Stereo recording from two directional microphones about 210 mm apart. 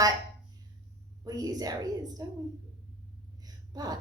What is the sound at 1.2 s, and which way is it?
A woman's voice, 15° right (ahead or behind).